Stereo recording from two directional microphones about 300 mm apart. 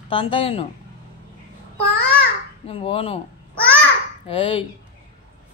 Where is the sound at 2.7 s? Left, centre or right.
Centre.